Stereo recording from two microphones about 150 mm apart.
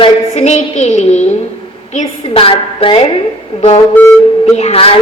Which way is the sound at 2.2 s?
40° left (ahead or behind).